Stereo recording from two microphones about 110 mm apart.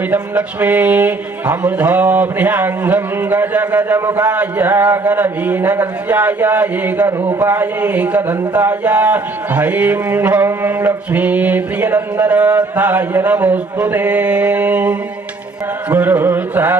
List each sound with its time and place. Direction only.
0.1 s speech: 10° right (ahead or behind)
15.9 s carnatic music: 20° right (ahead or behind)